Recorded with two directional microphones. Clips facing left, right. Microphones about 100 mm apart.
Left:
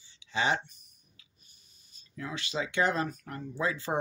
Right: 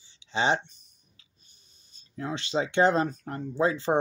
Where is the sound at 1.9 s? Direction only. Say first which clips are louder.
Right 5 dB; 30° right (ahead or behind).